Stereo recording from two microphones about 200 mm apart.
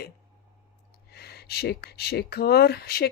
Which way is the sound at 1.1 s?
55° left (ahead or behind).